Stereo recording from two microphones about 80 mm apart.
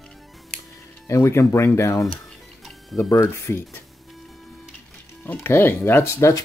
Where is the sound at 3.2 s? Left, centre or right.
Left.